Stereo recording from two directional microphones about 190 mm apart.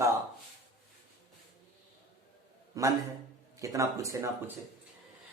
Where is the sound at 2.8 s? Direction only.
20° right (ahead or behind).